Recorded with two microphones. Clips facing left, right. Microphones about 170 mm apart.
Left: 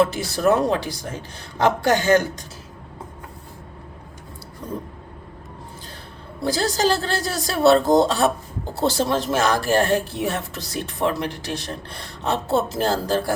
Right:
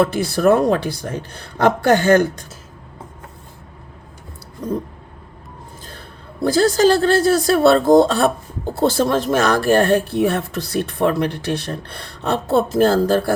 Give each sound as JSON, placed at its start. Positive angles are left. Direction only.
{"t": 0.0, "sound": "speech", "side_deg": -55}
{"t": 6.4, "sound": "speech", "side_deg": -55}